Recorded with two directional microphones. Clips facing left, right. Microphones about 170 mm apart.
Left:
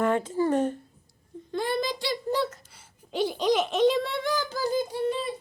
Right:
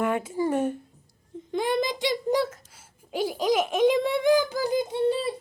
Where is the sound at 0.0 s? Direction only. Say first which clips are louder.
Left 1 dB; 10° right (ahead or behind).